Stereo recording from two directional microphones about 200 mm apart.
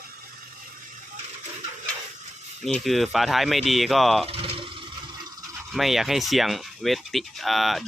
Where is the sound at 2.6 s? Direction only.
Centre (ahead or behind).